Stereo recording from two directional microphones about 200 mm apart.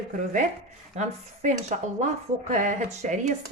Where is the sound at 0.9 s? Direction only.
35° right (ahead or behind).